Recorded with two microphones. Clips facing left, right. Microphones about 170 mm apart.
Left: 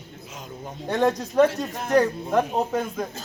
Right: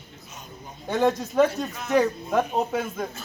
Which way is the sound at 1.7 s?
50° left (ahead or behind).